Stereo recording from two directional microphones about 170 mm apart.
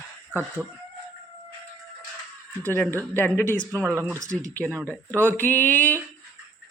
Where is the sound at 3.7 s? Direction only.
15° right (ahead or behind).